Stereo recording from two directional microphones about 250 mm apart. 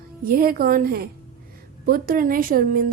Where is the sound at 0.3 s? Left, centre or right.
Right.